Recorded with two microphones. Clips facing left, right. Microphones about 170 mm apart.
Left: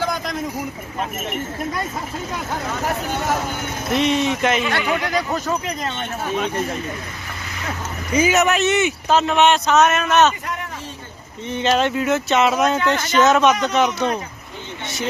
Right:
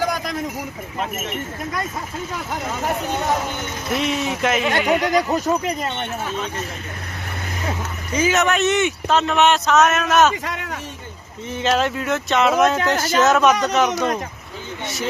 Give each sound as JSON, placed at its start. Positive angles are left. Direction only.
{"t": 3.8, "sound": "speech", "side_deg": 0}
{"t": 4.7, "sound": "speech", "side_deg": -45}
{"t": 5.3, "sound": "speech", "side_deg": -10}
{"t": 8.1, "sound": "speech", "side_deg": 10}
{"t": 10.4, "sound": "speech", "side_deg": -90}
{"t": 11.4, "sound": "speech", "side_deg": 0}